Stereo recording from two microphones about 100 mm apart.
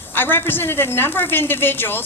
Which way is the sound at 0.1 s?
20° left (ahead or behind).